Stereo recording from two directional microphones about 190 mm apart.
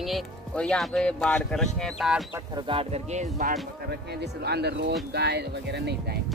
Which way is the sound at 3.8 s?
55° right (ahead or behind).